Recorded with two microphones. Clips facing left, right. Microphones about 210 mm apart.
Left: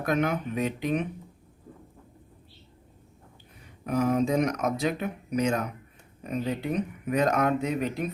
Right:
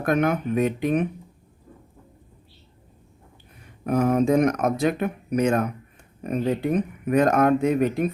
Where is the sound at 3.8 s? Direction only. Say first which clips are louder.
Right 4 dB; 55° right (ahead or behind).